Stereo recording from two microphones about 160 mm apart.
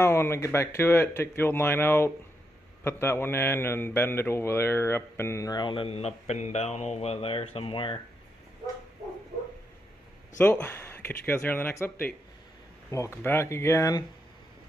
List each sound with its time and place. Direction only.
0.0 s a man's voice: 15° left (ahead or behind); by 8.0 s 35° left (ahead or behind)
10.4 s a man's voice: 10° left (ahead or behind)